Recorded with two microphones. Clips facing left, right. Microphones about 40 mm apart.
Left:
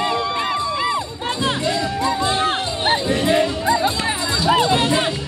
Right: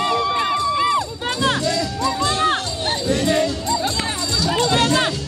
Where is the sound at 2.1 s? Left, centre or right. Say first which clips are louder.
Right 1 dB; left.